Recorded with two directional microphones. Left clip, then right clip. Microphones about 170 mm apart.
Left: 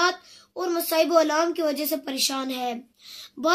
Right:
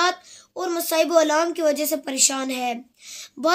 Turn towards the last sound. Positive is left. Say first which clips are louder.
# right 2 dB
turn(degrees=-30)  # may be behind; listen again after turning